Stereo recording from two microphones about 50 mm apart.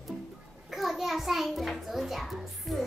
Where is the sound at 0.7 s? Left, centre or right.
Centre.